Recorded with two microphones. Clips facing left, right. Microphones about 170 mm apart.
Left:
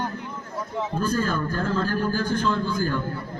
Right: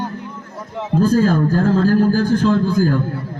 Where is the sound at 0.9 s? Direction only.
90° right.